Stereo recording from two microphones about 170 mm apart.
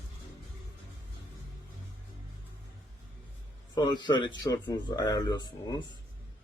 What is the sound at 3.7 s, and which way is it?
Speech, 25° left (ahead or behind).